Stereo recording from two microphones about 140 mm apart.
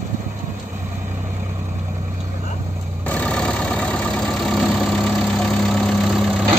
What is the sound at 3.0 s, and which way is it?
Vehicle, 10° left (ahead or behind).